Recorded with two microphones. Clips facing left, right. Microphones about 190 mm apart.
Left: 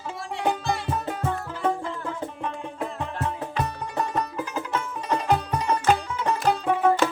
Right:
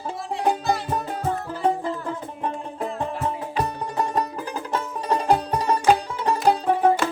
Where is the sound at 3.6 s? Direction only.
35° right (ahead or behind).